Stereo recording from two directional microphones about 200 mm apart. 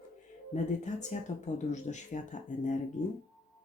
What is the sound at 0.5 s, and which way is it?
Speech, 35° left (ahead or behind).